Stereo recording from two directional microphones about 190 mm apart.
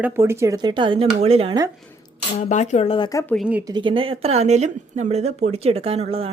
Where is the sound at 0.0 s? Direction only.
10° right (ahead or behind); by 1.5 s 30° right (ahead or behind).